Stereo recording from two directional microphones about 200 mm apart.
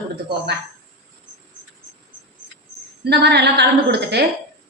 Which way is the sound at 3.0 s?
55° right (ahead or behind).